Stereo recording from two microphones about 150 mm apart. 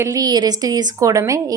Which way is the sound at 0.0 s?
25° right (ahead or behind).